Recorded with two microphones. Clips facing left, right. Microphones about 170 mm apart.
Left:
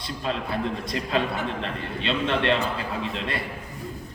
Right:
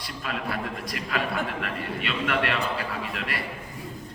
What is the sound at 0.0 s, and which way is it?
A man's voice, 25° left (ahead or behind).